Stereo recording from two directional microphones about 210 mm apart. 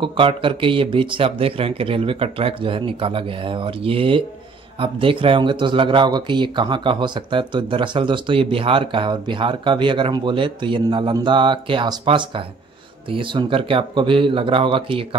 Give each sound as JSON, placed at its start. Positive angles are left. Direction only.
{"t": 0.0, "sound": "speech", "side_deg": -25}